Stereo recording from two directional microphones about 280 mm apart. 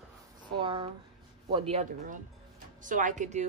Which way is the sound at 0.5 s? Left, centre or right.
Centre.